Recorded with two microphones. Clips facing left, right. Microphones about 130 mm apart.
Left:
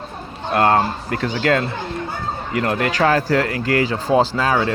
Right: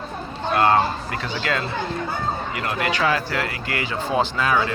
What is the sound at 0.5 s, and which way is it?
Speech, 50° left (ahead or behind).